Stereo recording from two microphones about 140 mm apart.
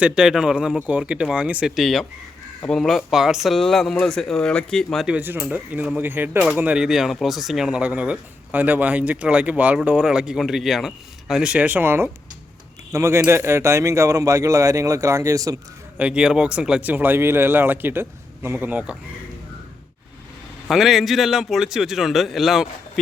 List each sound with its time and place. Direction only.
0.0 s speech: 5° right (ahead or behind)
5.1 s speech: 10° right (ahead or behind)
16.0 s speech: 10° right (ahead or behind)
20.7 s speech: centre (ahead or behind)